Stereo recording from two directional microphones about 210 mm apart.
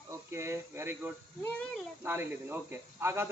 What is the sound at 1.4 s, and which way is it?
Speech, 5° left (ahead or behind).